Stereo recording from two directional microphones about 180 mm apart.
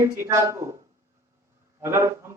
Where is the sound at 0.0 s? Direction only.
15° right (ahead or behind).